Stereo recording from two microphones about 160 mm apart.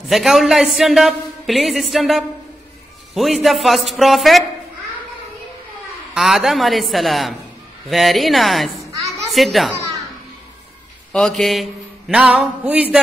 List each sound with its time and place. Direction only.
0.1 s a man's voice: centre (ahead or behind)
6.1 s a man's voice: centre (ahead or behind)
11.1 s a man's voice: centre (ahead or behind)